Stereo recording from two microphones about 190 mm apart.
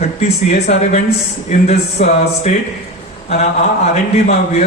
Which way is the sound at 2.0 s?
35° left (ahead or behind).